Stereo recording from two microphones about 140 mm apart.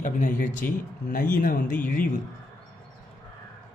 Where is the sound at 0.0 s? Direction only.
65° left (ahead or behind).